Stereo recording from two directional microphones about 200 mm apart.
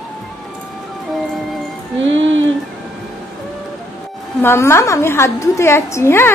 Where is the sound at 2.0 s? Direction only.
70° right (ahead or behind).